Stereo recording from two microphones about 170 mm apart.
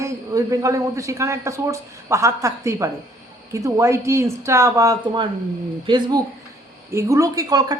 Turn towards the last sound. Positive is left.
turn(degrees=-20)  # may be behind; listen again after turning